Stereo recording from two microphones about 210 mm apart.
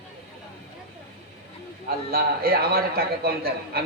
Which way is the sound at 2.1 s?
45° right (ahead or behind).